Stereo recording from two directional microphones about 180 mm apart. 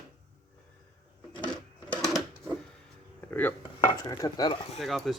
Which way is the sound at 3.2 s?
10° left (ahead or behind).